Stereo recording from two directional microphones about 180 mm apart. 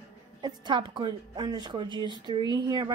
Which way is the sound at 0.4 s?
25° right (ahead or behind).